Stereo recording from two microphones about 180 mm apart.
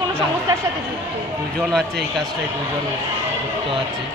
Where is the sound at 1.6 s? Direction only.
Centre (ahead or behind).